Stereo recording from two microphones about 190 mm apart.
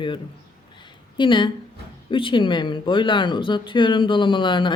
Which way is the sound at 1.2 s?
25° left (ahead or behind).